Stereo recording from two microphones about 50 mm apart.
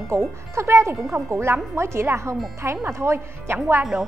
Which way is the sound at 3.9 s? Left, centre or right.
Right.